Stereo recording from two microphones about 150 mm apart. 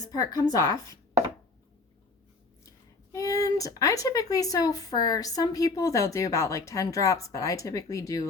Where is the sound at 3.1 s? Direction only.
25° left (ahead or behind).